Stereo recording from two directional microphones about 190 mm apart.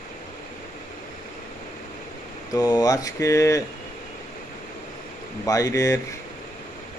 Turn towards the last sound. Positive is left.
turn(degrees=15)  # may be behind; listen again after turning